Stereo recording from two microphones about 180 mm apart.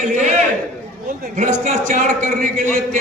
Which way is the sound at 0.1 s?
40° right (ahead or behind).